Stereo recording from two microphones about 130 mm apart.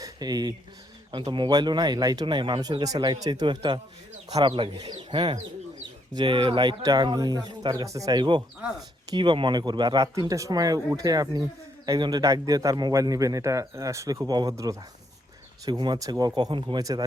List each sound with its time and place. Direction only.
0.0 s a man's voice: 30° right (ahead or behind)